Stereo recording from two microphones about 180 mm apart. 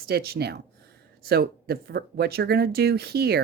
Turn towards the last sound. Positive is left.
turn(degrees=-65)  # may be behind; listen again after turning